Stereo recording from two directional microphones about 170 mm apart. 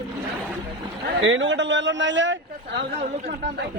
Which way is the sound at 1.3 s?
90° right.